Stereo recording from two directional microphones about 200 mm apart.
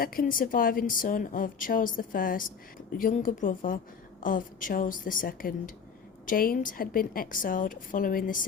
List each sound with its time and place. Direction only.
0.0 s speech: 45° left (ahead or behind)